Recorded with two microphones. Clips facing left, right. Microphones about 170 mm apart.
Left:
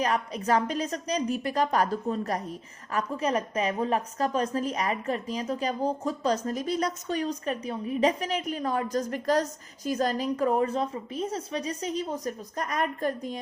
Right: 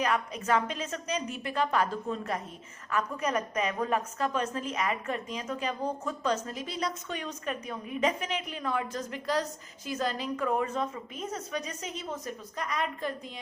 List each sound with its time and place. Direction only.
0.0 s a woman's voice: 35° left (ahead or behind)